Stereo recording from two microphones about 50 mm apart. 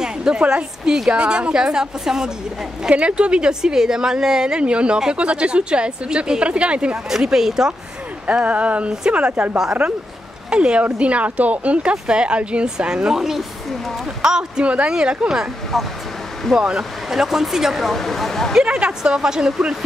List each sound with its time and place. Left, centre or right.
0.0 s a woman's voice: centre
2.9 s a woman's voice: right
7.1 s speech: centre
8.3 s a woman's voice: right
15.7 s speech: centre
16.5 s speech: centre
18.5 s speech: centre